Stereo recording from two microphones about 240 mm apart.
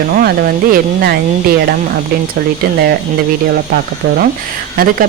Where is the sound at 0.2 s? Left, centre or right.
Right.